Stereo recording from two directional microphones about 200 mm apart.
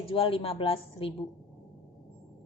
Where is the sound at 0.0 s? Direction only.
30° left (ahead or behind).